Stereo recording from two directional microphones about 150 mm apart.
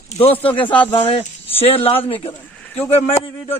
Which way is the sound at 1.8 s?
40° left (ahead or behind).